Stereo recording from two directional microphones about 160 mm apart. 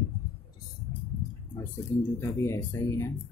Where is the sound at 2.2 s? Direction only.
15° left (ahead or behind).